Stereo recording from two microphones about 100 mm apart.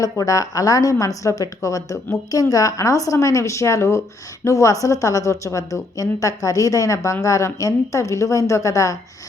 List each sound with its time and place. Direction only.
0.0 s a woman's voice: 35° left (ahead or behind)